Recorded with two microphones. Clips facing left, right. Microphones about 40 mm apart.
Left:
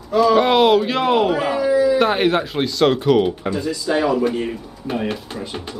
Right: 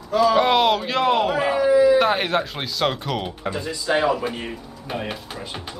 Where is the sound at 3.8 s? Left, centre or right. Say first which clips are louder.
Even; right.